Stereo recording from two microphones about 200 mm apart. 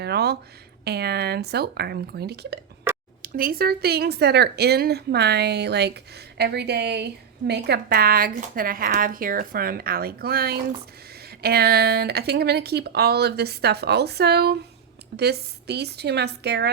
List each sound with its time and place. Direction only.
0.0 s speech: 55° right (ahead or behind)